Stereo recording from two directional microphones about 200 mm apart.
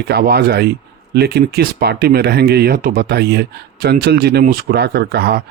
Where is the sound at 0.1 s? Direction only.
55° right (ahead or behind).